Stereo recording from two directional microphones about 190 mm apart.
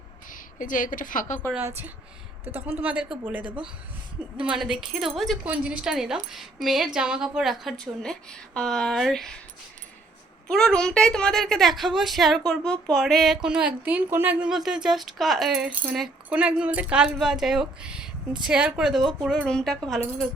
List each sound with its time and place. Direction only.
0.3 s a woman's voice: 45° left (ahead or behind)
1.5 s speech: 10° right (ahead or behind)
2.6 s speech: 30° right (ahead or behind)
2.8 s speech: 5° right (ahead or behind)
4.4 s a woman's voice: centre (ahead or behind)
10.5 s a woman's voice: 5° left (ahead or behind)